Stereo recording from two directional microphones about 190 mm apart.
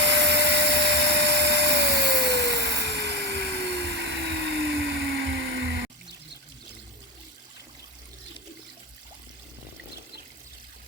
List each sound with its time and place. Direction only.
0.0 s vacuum cleaner: 65° right (ahead or behind)